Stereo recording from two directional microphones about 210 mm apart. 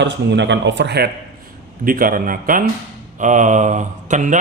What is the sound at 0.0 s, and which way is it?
A man's voice, 55° right (ahead or behind).